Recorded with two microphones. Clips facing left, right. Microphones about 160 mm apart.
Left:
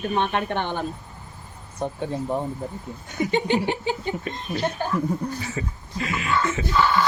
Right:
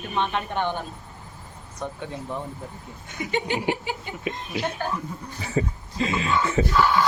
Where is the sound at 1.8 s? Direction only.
35° left (ahead or behind).